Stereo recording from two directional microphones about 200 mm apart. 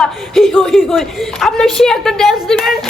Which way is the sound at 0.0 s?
Centre (ahead or behind).